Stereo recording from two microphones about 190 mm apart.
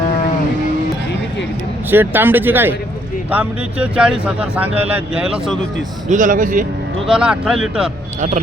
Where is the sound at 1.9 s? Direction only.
10° right (ahead or behind).